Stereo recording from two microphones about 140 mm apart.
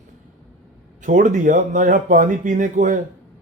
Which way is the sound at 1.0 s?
65° right (ahead or behind).